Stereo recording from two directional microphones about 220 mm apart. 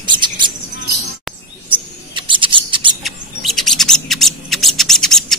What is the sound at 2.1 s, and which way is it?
Scissors, 20° right (ahead or behind).